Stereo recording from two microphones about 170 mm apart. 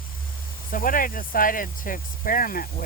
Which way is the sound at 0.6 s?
55° left (ahead or behind).